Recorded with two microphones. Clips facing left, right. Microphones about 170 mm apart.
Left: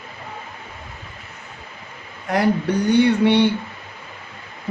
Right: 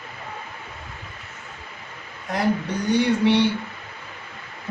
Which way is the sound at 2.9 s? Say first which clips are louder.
Left 3 dB; 60° left (ahead or behind).